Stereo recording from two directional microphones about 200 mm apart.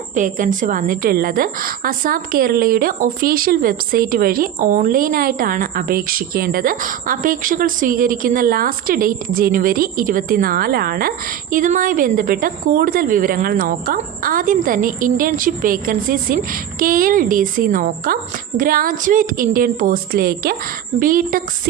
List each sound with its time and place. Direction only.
0.2 s a woman's voice: 40° right (ahead or behind)